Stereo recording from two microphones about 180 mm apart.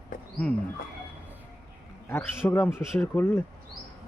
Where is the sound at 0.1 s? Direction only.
50° left (ahead or behind).